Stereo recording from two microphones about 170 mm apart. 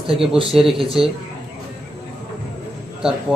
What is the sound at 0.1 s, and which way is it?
Speech, 30° right (ahead or behind).